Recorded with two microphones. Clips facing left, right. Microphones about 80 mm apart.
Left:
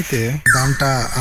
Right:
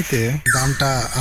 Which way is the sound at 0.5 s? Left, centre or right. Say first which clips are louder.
Left 2 dB; centre.